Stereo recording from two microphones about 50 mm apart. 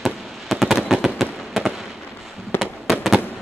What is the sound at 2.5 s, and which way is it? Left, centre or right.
Fireworks, left.